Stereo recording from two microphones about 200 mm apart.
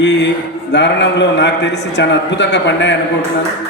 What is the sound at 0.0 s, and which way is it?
A man's voice, 60° left (ahead or behind).